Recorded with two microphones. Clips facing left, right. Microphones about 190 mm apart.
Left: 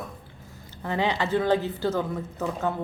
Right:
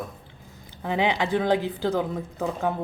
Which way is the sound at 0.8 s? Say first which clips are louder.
Right 2 dB; 15° right (ahead or behind).